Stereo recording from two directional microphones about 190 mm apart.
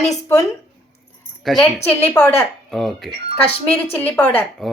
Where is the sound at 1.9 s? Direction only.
10° left (ahead or behind).